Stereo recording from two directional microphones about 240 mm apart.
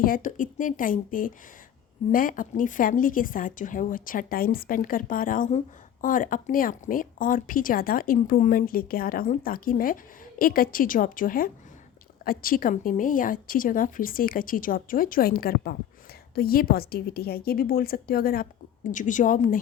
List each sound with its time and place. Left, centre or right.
0.0 s a woman's voice: left